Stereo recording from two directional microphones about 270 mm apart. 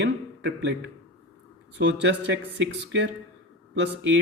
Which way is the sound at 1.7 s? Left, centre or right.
Right.